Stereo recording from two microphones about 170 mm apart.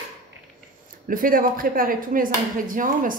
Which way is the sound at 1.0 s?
55° right (ahead or behind).